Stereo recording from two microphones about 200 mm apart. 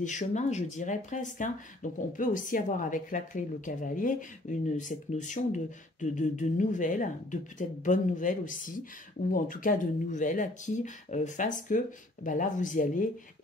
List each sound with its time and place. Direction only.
0.0 s speech: 35° left (ahead or behind)